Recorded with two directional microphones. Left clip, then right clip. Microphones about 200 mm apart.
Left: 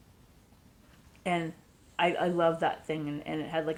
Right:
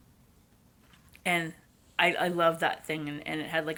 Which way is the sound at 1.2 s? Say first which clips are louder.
Right 2 dB; 15° right (ahead or behind).